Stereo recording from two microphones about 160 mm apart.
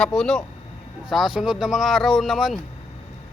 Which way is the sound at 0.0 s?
5° left (ahead or behind).